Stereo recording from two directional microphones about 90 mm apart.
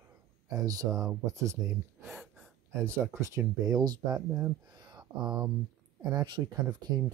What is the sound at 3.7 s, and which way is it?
Speech, 50° right (ahead or behind).